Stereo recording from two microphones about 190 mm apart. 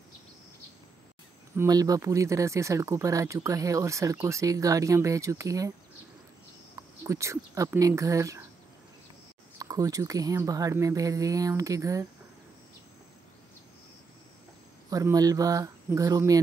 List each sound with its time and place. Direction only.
1.6 s speech: 20° right (ahead or behind)
6.7 s speech: 15° right (ahead or behind)
9.6 s speech: 20° right (ahead or behind)
14.9 s speech: 20° right (ahead or behind)